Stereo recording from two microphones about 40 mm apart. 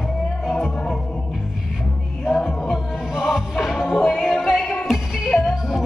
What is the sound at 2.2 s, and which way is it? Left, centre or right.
Music, centre.